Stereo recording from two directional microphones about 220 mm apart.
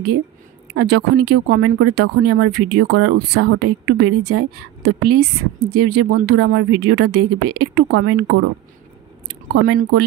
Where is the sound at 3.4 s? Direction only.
65° right (ahead or behind).